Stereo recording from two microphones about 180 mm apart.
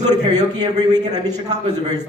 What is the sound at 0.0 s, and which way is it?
A man's voice, 20° right (ahead or behind).